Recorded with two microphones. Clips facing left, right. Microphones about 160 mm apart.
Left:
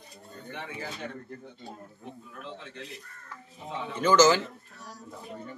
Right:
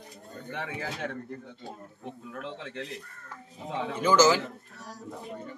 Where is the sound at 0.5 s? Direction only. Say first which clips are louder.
Right 3 dB; 80° right.